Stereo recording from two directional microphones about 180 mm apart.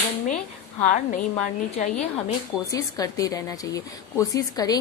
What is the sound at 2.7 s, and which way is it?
A woman's voice, 20° left (ahead or behind).